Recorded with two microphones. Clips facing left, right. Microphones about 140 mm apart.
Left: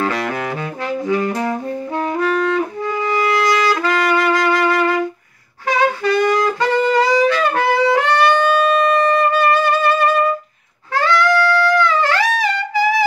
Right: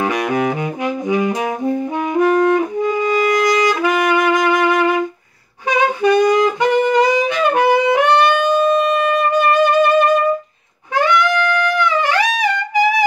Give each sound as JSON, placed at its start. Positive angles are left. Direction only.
{"t": 0.0, "sound": "saxophone", "side_deg": -15}
{"t": 2.1, "sound": "music", "side_deg": -15}
{"t": 5.7, "sound": "saxophone", "side_deg": -15}
{"t": 11.0, "sound": "music", "side_deg": -15}